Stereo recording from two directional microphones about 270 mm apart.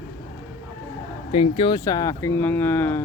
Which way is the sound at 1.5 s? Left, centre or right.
Centre.